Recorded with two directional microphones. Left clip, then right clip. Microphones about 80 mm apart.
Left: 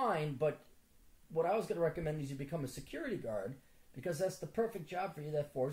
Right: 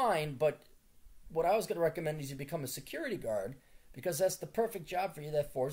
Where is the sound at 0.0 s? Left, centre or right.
Right.